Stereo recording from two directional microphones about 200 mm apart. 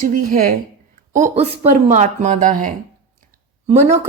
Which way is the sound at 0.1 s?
40° right (ahead or behind).